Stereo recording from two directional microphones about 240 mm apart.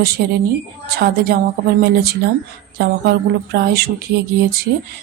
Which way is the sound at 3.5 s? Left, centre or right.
Right.